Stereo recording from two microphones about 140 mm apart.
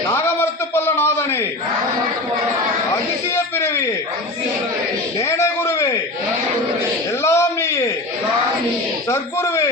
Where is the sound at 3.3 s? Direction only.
20° left (ahead or behind).